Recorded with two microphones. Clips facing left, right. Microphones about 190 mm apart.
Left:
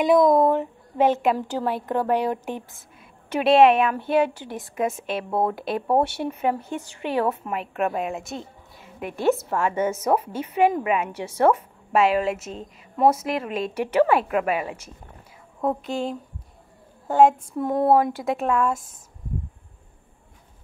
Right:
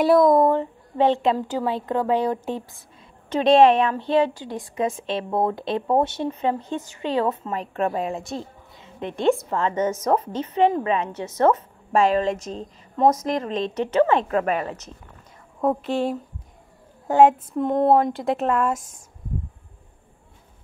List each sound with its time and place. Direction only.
0.0 s a woman's voice: 20° left (ahead or behind)
1.0 s speech: 5° left (ahead or behind)
1.6 s a woman's voice: 20° right (ahead or behind)
2.1 s a woman's voice: 15° left (ahead or behind); by 17.4 s 10° right (ahead or behind)
17.6 s speech: 5° left (ahead or behind)